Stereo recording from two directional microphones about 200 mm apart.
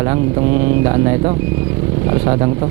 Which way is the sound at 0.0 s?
20° right (ahead or behind).